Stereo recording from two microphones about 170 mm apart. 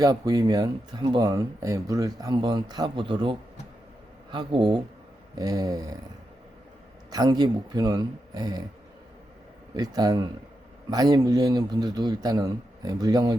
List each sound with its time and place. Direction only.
0.0 s speech: 20° right (ahead or behind)
7.1 s speech: 25° right (ahead or behind)
9.7 s speech: 25° right (ahead or behind)